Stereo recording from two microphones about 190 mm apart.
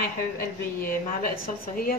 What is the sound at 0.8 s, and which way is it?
A woman's voice, 50° left (ahead or behind).